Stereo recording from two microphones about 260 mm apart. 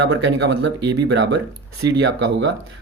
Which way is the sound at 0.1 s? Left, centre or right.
Right.